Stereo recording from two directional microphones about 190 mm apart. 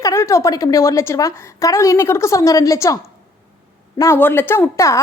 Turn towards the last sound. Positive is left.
turn(degrees=15)  # may be behind; listen again after turning